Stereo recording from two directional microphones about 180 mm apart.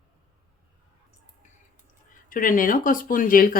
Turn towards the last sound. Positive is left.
turn(degrees=50)  # may be behind; listen again after turning